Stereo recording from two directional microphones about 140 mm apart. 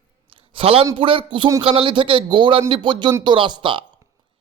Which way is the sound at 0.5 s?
45° right (ahead or behind).